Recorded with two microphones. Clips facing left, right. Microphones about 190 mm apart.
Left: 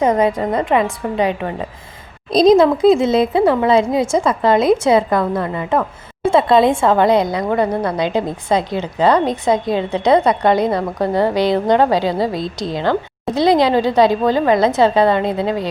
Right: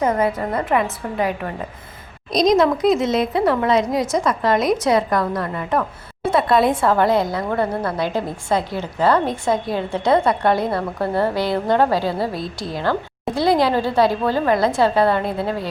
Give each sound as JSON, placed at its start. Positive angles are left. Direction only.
{"t": 0.0, "sound": "a woman's voice", "side_deg": 20}